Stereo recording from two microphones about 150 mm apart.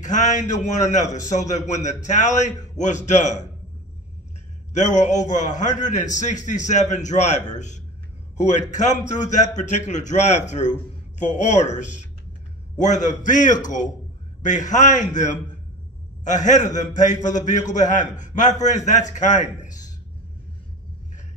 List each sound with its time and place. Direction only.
0.0 s a man's voice: 55° left (ahead or behind)
4.7 s a man's voice: 55° left (ahead or behind)